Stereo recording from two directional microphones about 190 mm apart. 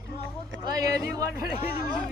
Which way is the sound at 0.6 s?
20° right (ahead or behind).